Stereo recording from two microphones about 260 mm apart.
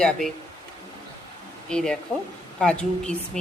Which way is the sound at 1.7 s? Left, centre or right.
Centre.